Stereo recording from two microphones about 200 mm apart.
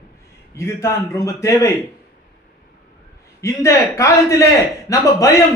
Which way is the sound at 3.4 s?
15° left (ahead or behind).